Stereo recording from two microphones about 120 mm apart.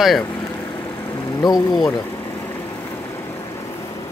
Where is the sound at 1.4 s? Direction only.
30° left (ahead or behind).